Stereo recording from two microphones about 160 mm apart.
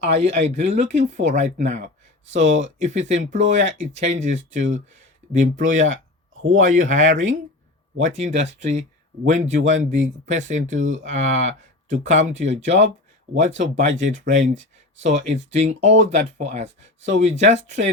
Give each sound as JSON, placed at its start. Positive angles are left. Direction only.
{"t": 0.0, "sound": "speech", "side_deg": -45}